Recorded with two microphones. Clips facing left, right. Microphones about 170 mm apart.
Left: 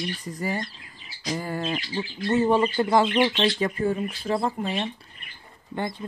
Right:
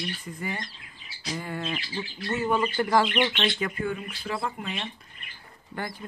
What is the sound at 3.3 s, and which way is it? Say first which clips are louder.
Speech: left 5 dB; 35° left (ahead or behind).